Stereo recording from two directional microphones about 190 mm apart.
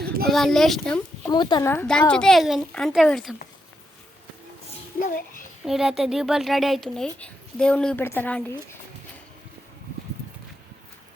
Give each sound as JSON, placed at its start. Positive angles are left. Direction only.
{"t": 0.0, "sound": "a sound", "side_deg": -55}
{"t": 0.3, "sound": "speech", "side_deg": 0}
{"t": 1.3, "sound": "speech", "side_deg": 25}
{"t": 4.9, "sound": "a child's voice", "side_deg": 45}
{"t": 5.6, "sound": "speech", "side_deg": 0}